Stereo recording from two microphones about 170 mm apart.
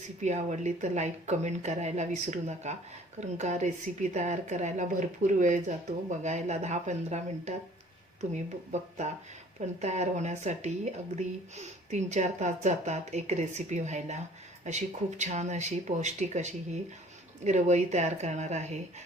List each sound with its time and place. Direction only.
0.2 s a woman's voice: 45° right (ahead or behind)